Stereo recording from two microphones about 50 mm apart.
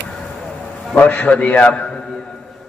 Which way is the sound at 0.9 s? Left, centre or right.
Left.